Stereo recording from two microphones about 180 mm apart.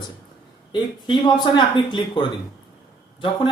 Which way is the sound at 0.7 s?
25° left (ahead or behind).